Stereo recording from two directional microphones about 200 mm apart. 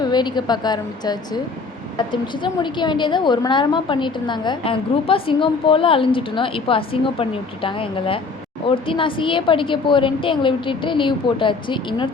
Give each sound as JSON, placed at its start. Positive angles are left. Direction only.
{"t": 0.0, "sound": "a woman's voice", "side_deg": 20}